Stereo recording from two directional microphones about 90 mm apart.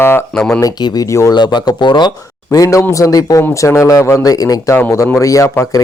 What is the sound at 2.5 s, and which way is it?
Speech, 40° left (ahead or behind).